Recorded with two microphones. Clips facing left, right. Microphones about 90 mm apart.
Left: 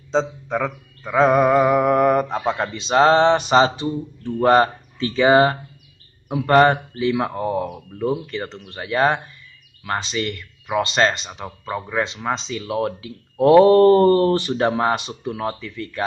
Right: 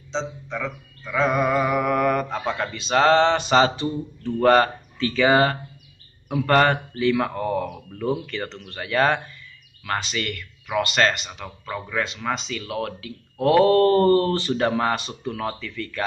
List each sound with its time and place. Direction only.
0.1 s speech: 50° left (ahead or behind); by 16.0 s 25° left (ahead or behind)